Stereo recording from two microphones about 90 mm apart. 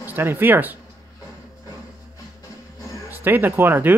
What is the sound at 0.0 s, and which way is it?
Speech, 25° right (ahead or behind).